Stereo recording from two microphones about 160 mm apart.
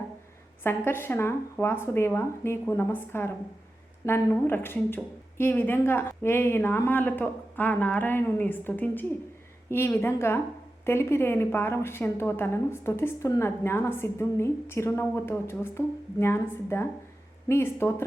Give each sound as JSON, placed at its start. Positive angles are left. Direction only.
{"t": 0.6, "sound": "a woman's voice", "side_deg": 15}